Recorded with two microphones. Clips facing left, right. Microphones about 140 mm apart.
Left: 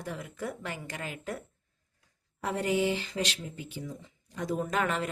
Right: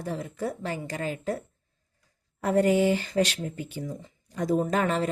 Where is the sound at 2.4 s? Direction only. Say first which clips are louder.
Right 7 dB; 45° right (ahead or behind).